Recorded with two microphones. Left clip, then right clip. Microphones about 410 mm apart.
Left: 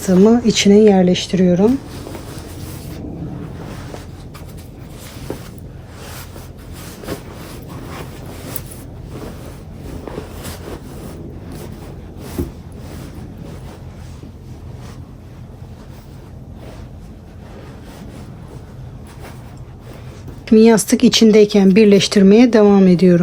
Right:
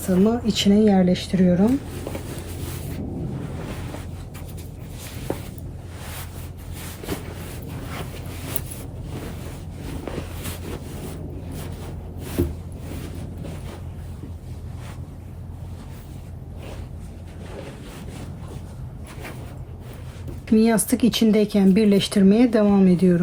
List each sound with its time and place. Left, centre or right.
0.3 s speech: centre
20.4 s speech: centre